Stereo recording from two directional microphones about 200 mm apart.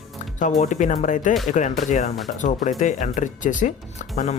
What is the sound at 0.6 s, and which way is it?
Speech, 35° left (ahead or behind).